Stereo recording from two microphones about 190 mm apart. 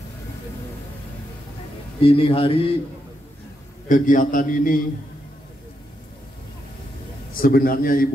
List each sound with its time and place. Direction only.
2.0 s a man's voice: 30° left (ahead or behind)
3.9 s a man's voice: 45° left (ahead or behind)
7.3 s a man's voice: 50° left (ahead or behind)